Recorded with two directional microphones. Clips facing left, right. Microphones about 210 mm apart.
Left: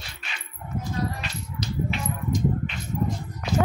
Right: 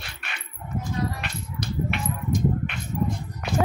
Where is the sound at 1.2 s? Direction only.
60° right (ahead or behind).